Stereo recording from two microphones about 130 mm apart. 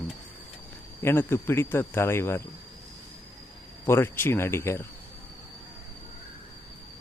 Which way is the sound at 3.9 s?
15° left (ahead or behind).